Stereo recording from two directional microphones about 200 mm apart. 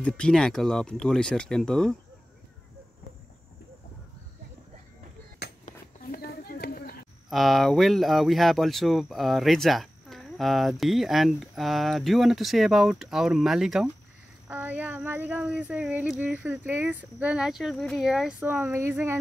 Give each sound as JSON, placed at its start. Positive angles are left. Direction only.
{"t": 0.0, "sound": "speech", "side_deg": 5}
{"t": 5.7, "sound": "a sound", "side_deg": 45}
{"t": 7.2, "sound": "speech", "side_deg": 0}